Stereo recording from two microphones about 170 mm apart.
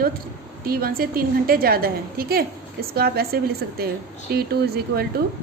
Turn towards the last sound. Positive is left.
turn(degrees=-70)  # may be behind; listen again after turning